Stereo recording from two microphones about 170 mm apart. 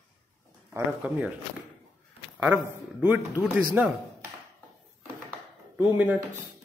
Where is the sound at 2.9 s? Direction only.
10° right (ahead or behind).